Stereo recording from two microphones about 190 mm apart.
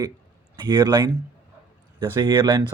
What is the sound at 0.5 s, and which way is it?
Speech, 20° right (ahead or behind).